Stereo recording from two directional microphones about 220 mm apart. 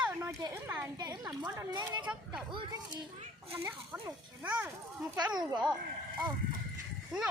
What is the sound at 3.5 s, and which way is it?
Speech, 10° right (ahead or behind).